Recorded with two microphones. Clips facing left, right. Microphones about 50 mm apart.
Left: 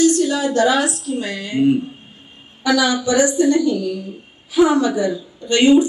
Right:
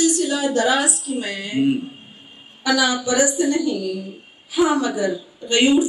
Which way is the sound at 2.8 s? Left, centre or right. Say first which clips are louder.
Left 2 dB; centre.